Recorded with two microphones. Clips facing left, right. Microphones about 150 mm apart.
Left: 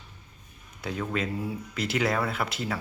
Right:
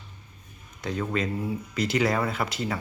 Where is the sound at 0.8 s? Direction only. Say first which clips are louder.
Right 2 dB; 5° left (ahead or behind).